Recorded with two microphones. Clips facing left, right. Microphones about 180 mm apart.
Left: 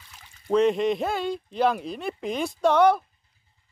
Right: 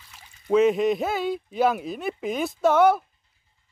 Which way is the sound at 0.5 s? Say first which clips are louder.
Right 2 dB; 5° right (ahead or behind).